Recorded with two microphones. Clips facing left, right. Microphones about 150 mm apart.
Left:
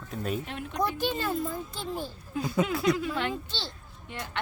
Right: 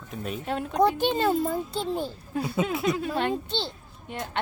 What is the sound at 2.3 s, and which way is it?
Speech, 65° right (ahead or behind).